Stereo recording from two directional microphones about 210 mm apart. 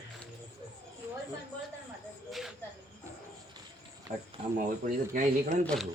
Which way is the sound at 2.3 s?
Centre (ahead or behind).